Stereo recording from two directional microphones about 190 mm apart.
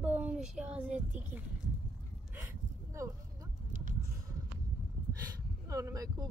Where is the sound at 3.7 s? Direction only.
45° right (ahead or behind).